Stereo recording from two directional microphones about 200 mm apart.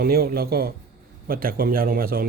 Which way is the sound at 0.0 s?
50° right (ahead or behind).